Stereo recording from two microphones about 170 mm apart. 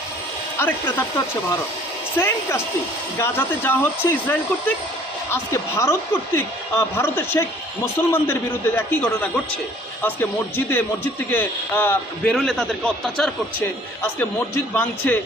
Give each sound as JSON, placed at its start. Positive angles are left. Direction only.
{"t": 0.6, "sound": "a man's voice", "side_deg": 10}
{"t": 2.1, "sound": "a man's voice", "side_deg": 15}
{"t": 11.3, "sound": "a man's voice", "side_deg": 10}